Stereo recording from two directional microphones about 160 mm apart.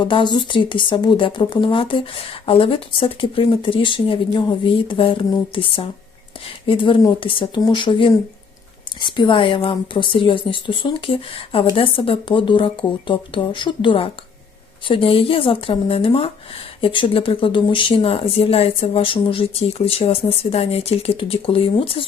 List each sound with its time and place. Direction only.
0.0 s speech: 30° left (ahead or behind)